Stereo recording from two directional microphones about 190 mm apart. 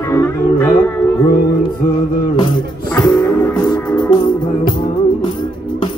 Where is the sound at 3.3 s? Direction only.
20° left (ahead or behind).